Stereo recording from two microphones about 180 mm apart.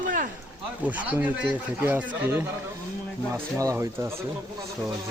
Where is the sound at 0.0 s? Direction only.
50° right (ahead or behind).